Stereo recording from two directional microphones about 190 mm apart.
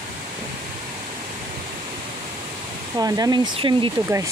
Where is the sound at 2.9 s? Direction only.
20° right (ahead or behind).